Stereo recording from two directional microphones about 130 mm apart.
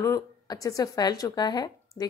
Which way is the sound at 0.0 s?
25° left (ahead or behind).